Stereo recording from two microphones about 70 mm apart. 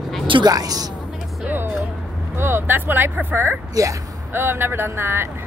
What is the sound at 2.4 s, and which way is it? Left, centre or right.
Speech, right.